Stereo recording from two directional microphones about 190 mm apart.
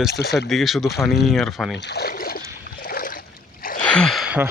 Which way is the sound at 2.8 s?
50° left (ahead or behind).